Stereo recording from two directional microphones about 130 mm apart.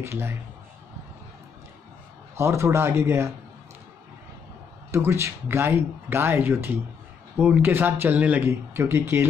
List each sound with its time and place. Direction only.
0.0 s speech: 20° right (ahead or behind)
2.3 s speech: 20° right (ahead or behind)
4.9 s speech: 20° right (ahead or behind)